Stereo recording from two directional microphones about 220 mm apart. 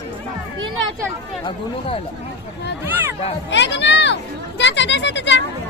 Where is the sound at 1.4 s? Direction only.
25° left (ahead or behind).